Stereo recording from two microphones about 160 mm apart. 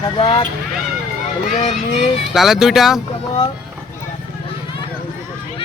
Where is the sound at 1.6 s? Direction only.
45° left (ahead or behind).